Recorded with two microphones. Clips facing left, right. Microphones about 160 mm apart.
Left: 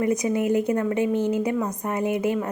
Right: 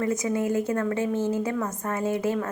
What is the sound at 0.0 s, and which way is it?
A woman's voice, 20° left (ahead or behind).